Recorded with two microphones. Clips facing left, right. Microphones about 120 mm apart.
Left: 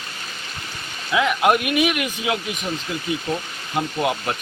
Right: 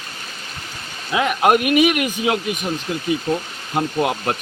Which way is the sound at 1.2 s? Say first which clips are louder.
Right 4 dB; 50° right (ahead or behind).